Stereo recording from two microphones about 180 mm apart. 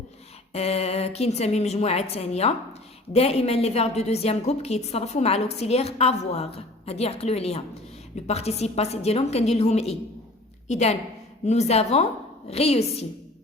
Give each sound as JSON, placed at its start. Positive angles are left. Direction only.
{"t": 0.5, "sound": "a woman's voice", "side_deg": 35}